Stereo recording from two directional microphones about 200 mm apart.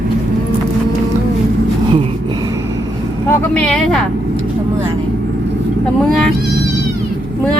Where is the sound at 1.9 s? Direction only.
25° right (ahead or behind).